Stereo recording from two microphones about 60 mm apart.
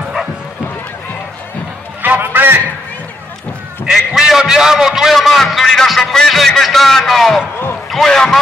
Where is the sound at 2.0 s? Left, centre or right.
Right.